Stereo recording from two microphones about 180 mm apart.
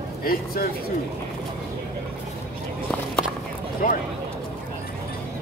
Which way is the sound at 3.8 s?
50° left (ahead or behind).